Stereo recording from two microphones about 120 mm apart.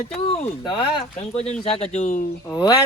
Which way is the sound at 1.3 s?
60° left (ahead or behind).